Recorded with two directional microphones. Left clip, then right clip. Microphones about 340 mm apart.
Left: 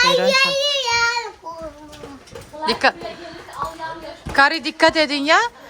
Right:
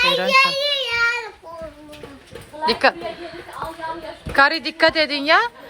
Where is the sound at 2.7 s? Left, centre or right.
Centre.